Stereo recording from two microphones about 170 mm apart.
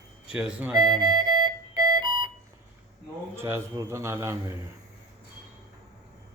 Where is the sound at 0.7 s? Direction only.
25° right (ahead or behind).